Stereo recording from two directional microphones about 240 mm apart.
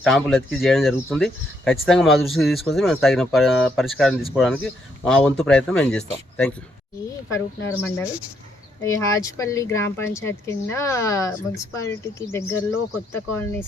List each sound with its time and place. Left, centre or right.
0.0 s speech: centre
7.8 s speech: centre